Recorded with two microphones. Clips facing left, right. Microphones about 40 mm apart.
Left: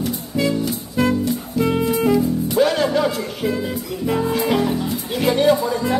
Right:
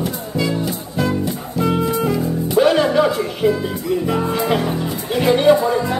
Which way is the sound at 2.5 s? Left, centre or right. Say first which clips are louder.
Right 4 dB; right.